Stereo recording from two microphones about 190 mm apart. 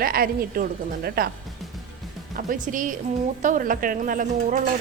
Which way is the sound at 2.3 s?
45° right (ahead or behind).